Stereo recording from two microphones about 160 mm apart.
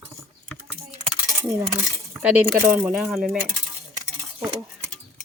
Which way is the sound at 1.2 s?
20° right (ahead or behind).